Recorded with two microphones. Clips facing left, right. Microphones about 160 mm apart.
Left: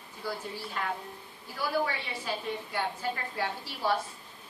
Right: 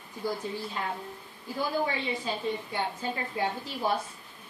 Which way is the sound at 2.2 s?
20° right (ahead or behind).